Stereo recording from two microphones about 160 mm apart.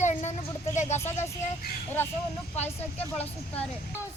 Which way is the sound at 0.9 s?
15° left (ahead or behind).